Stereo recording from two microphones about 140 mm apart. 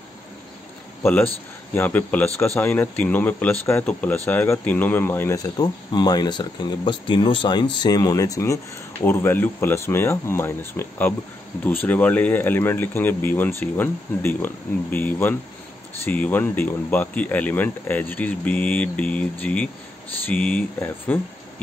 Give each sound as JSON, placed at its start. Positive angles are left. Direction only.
{"t": 1.0, "sound": "speech", "side_deg": 15}
{"t": 5.4, "sound": "speech", "side_deg": 30}